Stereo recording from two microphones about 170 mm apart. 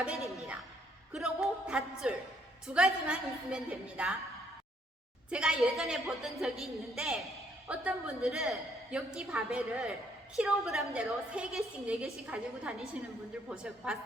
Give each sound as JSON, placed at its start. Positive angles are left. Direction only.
{"t": 1.1, "sound": "music", "side_deg": -5}
{"t": 2.6, "sound": "a woman's voice", "side_deg": -5}
{"t": 5.3, "sound": "a woman's voice", "side_deg": -5}